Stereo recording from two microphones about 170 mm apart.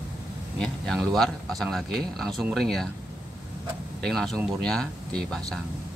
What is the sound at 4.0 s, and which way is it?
Speech, centre (ahead or behind).